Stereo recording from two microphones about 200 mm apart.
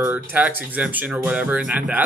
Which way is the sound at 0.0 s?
10° right (ahead or behind).